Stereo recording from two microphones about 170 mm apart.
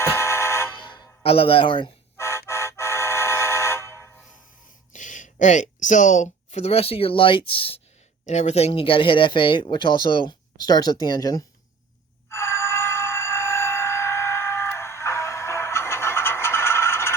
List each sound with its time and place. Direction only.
0.0 s vehicle horn: 15° left (ahead or behind)
0.8 s music: 30° left (ahead or behind)
2.1 s vehicle: 15° left (ahead or behind)
4.9 s speech: 45° left (ahead or behind); by 11.4 s 20° left (ahead or behind)
12.3 s telephone bell ringing: 15° left (ahead or behind)